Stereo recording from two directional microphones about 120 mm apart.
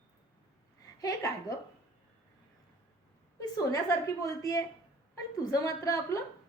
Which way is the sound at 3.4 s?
30° left (ahead or behind).